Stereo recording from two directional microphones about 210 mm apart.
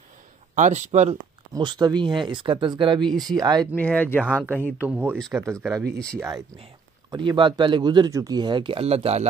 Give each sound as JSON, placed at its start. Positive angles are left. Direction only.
{"t": 0.6, "sound": "speech", "side_deg": -35}
{"t": 1.5, "sound": "speech", "side_deg": -20}
{"t": 3.7, "sound": "speech", "side_deg": 5}
{"t": 4.8, "sound": "speech", "side_deg": -5}
{"t": 5.5, "sound": "speech", "side_deg": -10}
{"t": 5.9, "sound": "speech", "side_deg": 5}
{"t": 6.6, "sound": "speech", "side_deg": -20}